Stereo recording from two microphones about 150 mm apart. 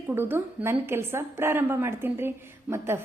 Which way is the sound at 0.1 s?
15° right (ahead or behind).